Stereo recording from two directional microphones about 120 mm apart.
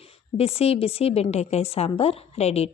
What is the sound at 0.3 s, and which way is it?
A woman's voice, 55° left (ahead or behind).